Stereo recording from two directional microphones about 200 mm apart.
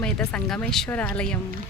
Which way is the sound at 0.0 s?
5° left (ahead or behind).